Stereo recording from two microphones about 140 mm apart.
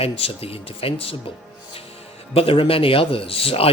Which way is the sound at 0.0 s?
45° left (ahead or behind).